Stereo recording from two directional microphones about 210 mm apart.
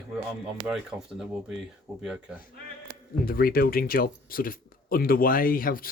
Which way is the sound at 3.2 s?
45° left (ahead or behind).